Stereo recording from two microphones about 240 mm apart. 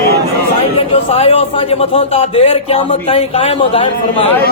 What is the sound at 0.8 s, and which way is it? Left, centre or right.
A man's voice, left.